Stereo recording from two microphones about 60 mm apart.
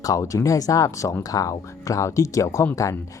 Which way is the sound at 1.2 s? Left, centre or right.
Left.